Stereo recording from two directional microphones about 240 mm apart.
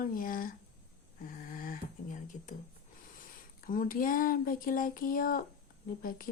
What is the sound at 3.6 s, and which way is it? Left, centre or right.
Speech, left.